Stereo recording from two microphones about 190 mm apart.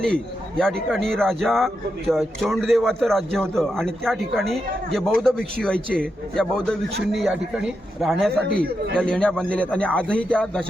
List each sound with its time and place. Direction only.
0.0 s a man's voice: 5° left (ahead or behind)
8.4 s speech: 55° right (ahead or behind)
9.0 s a man's voice: 5° left (ahead or behind)